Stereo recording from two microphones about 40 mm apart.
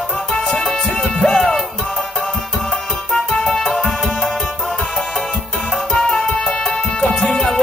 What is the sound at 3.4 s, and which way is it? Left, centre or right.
Music, centre.